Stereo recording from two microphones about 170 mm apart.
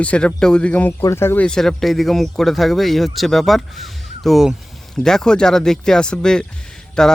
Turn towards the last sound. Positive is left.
turn(degrees=5)  # may be behind; listen again after turning